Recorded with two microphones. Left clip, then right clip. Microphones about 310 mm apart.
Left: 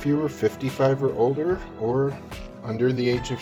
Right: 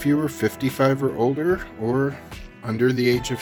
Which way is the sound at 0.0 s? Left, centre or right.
Right.